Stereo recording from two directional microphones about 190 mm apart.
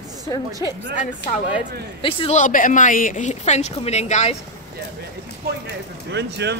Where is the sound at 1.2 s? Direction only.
65° left (ahead or behind).